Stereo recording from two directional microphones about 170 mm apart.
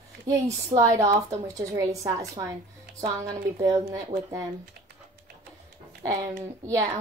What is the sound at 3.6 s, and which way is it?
Speech, 20° right (ahead or behind).